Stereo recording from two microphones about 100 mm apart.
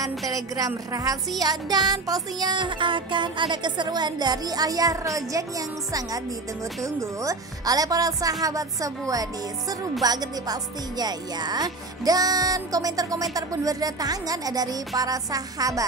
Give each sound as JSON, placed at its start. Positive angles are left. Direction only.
{"t": 0.3, "sound": "speech", "side_deg": -35}
{"t": 1.9, "sound": "music", "side_deg": -40}
{"t": 6.8, "sound": "speech", "side_deg": -30}